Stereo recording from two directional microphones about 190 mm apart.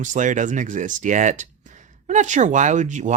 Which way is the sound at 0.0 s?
40° right (ahead or behind).